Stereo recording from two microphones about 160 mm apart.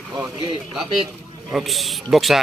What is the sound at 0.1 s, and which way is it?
Speech, 25° right (ahead or behind).